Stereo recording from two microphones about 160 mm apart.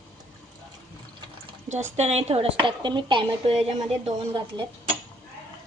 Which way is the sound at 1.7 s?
45° right (ahead or behind).